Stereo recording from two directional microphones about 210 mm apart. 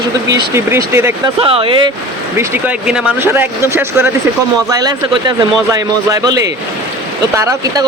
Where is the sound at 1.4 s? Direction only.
25° right (ahead or behind).